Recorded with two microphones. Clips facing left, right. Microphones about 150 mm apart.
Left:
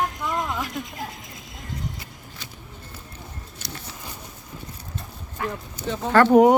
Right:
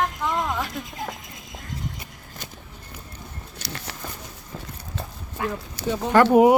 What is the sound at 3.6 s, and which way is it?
Patter, 80° right.